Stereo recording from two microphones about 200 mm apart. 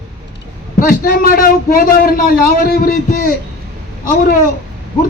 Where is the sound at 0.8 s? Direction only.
45° left (ahead or behind).